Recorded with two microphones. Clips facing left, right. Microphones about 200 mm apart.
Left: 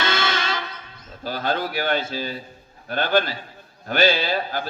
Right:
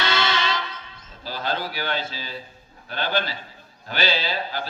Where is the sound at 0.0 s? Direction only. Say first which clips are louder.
Even; 50° left (ahead or behind).